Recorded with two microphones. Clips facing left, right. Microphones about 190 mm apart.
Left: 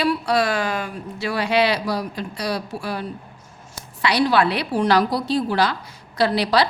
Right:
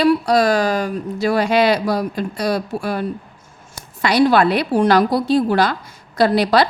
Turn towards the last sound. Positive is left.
turn(degrees=-50)  # may be behind; listen again after turning